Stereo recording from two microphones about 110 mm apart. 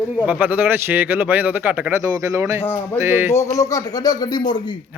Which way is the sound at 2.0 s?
25° right (ahead or behind).